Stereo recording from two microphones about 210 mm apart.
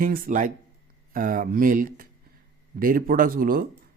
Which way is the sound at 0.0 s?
40° right (ahead or behind).